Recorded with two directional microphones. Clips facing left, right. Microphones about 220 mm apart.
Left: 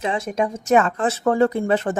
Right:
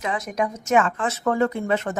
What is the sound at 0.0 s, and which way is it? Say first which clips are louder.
A woman's voice: left 3 dB; 30° left (ahead or behind).